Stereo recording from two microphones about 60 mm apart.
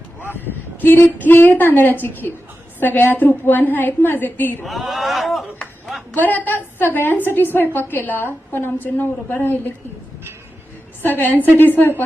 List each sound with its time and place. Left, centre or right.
0.3 s a woman's voice: left
4.6 s a sound: centre
6.1 s a woman's voice: left
11.0 s a woman's voice: left